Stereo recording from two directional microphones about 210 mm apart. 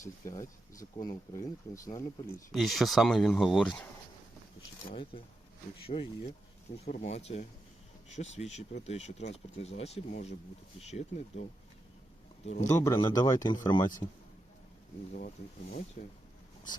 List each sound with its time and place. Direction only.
0.0 s speech: 15° left (ahead or behind)
2.5 s speech: centre (ahead or behind)
4.9 s speech: 25° left (ahead or behind)
12.6 s speech: 15° left (ahead or behind)
15.1 s speech: 40° left (ahead or behind)